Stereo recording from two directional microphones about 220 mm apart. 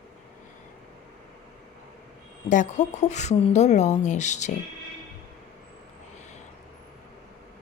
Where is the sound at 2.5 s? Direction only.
35° left (ahead or behind).